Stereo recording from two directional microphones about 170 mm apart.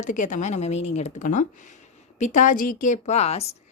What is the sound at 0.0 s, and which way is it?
Speech, 45° left (ahead or behind).